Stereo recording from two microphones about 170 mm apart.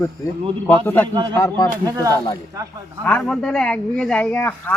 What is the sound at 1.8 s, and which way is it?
Speech, 20° right (ahead or behind).